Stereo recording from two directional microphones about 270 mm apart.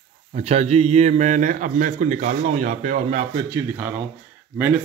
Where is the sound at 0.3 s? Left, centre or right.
Right.